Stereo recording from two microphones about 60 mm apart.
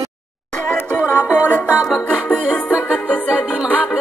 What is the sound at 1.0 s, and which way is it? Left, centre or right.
Music, right.